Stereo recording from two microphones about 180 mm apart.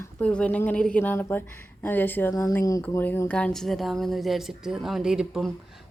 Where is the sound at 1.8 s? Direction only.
10° left (ahead or behind).